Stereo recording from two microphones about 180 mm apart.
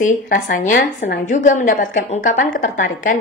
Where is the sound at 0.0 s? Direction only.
50° left (ahead or behind).